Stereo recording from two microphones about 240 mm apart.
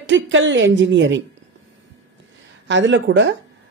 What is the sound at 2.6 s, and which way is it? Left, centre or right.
Speech, right.